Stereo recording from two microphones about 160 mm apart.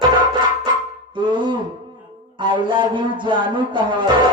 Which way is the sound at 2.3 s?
30° right (ahead or behind).